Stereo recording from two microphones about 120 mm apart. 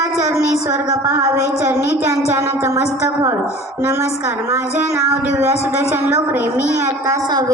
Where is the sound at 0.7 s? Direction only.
25° right (ahead or behind).